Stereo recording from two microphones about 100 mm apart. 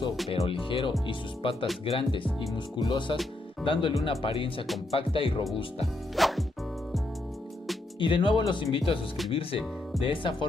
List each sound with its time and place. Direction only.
0.3 s speech: 65° left (ahead or behind)
6.1 s music: centre (ahead or behind)
8.0 s speech: 55° left (ahead or behind)